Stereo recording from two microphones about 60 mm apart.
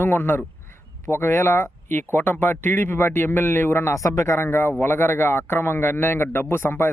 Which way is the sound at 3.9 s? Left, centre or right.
Left.